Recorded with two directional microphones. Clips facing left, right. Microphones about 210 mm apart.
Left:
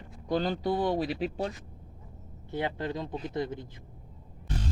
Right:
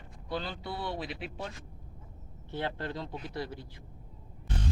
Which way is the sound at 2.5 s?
15° left (ahead or behind).